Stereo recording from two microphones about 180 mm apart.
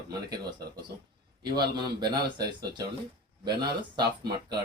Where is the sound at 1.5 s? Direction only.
25° right (ahead or behind).